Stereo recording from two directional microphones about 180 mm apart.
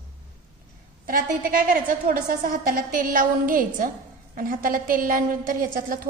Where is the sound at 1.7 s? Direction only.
50° right (ahead or behind).